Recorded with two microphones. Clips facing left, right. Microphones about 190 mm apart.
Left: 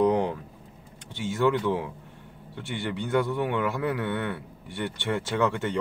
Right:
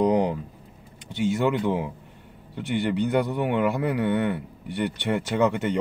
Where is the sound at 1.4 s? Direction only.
15° right (ahead or behind).